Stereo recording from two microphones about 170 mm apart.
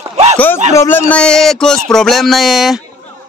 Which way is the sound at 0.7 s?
15° left (ahead or behind).